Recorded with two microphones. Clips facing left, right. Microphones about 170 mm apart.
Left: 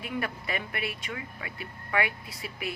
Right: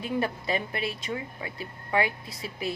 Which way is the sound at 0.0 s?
30° right (ahead or behind).